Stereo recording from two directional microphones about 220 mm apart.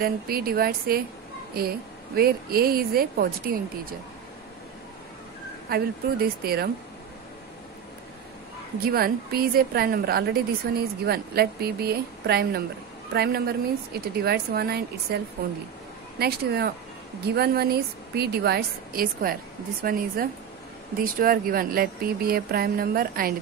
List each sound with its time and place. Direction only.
0.0 s a woman's voice: 45° right (ahead or behind)
5.7 s a woman's voice: 45° right (ahead or behind)
8.7 s a woman's voice: 40° right (ahead or behind)